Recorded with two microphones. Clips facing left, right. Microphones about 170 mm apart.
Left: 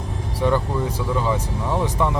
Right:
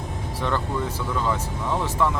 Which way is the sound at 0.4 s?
15° left (ahead or behind).